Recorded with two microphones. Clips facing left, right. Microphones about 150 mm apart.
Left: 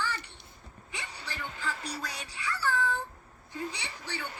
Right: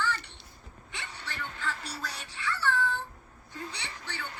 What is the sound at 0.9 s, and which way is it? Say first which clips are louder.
Music: even; centre (ahead or behind).